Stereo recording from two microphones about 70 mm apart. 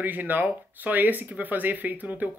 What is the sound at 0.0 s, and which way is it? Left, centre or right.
Speech, right.